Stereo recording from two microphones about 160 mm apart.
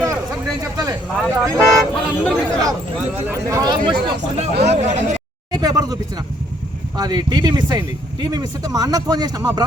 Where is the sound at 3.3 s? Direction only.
20° right (ahead or behind).